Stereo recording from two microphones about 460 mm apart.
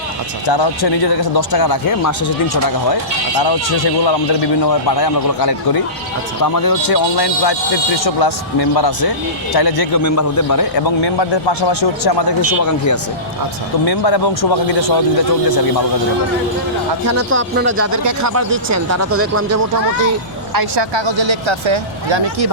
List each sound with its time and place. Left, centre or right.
0.4 s a man's voice: left
3.4 s a man's voice: left
12.5 s speech: left
13.8 s speech: left
17.1 s speech: right
17.9 s speech: right
20.5 s speech: right
20.9 s speech: right